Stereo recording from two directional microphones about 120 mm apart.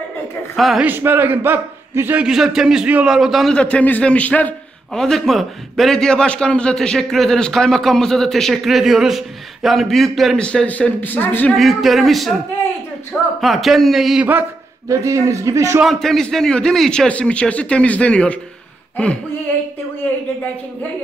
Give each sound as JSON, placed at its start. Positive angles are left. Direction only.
{"t": 0.6, "sound": "a man's voice", "side_deg": 0}
{"t": 0.8, "sound": "a man's voice", "side_deg": -15}
{"t": 2.2, "sound": "a man's voice", "side_deg": -5}
{"t": 3.5, "sound": "a man's voice", "side_deg": 10}
{"t": 11.5, "sound": "a man's voice", "side_deg": 0}
{"t": 13.4, "sound": "a man's voice", "side_deg": 0}
{"t": 14.9, "sound": "a man's voice", "side_deg": -25}
{"t": 15.8, "sound": "a man's voice", "side_deg": 0}